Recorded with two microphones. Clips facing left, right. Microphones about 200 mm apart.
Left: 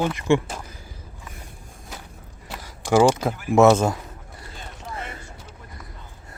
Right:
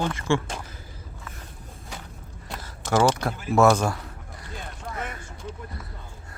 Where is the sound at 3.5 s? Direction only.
25° left (ahead or behind).